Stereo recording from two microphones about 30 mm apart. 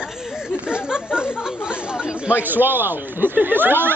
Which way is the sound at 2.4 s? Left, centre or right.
Right.